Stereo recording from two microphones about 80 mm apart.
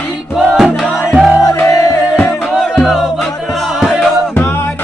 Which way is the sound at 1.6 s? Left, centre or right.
Left.